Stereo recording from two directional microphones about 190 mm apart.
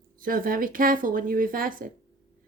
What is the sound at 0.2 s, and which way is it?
Speech, 50° right (ahead or behind).